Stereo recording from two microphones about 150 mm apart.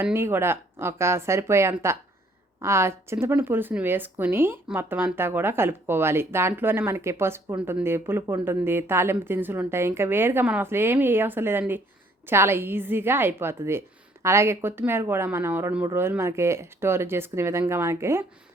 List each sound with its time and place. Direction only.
0.0 s speech: 15° right (ahead or behind)